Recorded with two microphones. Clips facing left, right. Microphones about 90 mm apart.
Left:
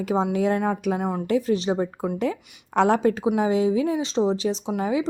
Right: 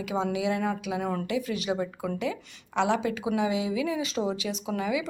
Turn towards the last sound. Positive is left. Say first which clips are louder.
# left 5 dB
turn(degrees=35)  # may be behind; listen again after turning